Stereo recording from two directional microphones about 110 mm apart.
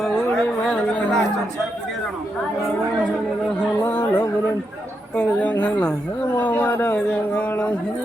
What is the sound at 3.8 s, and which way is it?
Music, 20° left (ahead or behind).